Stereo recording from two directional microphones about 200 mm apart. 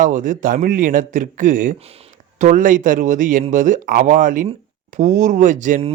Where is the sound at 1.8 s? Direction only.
30° right (ahead or behind).